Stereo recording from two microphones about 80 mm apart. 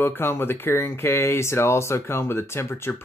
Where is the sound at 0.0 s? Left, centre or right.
Left.